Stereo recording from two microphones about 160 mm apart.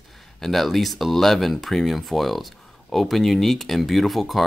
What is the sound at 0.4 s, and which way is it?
Speech, centre (ahead or behind).